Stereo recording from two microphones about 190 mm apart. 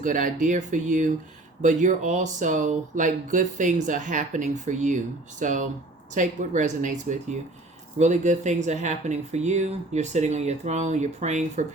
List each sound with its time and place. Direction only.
0.0 s speech: 45° right (ahead or behind)